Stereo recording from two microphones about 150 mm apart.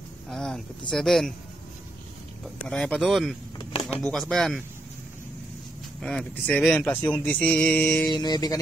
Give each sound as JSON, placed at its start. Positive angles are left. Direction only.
{"t": 0.3, "sound": "speech", "side_deg": 5}
{"t": 2.4, "sound": "speech", "side_deg": 5}
{"t": 5.9, "sound": "speech", "side_deg": 0}
{"t": 8.1, "sound": "mantra", "side_deg": 30}